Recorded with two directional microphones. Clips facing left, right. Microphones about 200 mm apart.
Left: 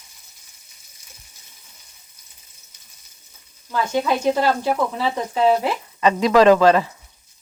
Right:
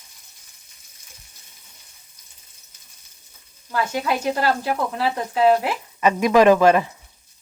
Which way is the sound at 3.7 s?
5° right (ahead or behind).